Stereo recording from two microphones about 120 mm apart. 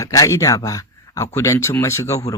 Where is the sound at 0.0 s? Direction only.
30° left (ahead or behind).